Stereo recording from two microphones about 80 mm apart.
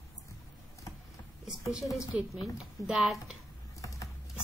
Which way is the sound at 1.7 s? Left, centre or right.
Centre.